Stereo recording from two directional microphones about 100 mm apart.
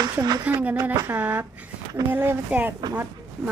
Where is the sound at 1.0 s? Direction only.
15° right (ahead or behind).